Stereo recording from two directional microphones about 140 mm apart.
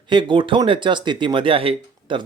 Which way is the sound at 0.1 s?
35° right (ahead or behind).